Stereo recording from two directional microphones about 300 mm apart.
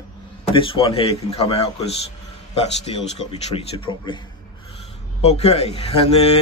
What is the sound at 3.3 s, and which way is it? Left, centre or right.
Speech, centre.